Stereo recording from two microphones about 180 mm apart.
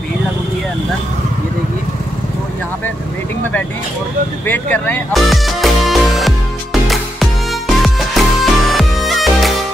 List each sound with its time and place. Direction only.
4.5 s music: 10° left (ahead or behind)